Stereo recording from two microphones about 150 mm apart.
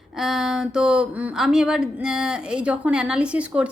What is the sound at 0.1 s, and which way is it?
Speech, centre (ahead or behind).